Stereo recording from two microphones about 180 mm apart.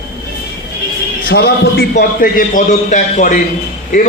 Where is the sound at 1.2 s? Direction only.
65° left (ahead or behind).